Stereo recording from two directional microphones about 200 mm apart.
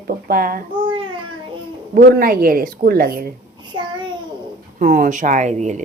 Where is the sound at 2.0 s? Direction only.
50° right (ahead or behind).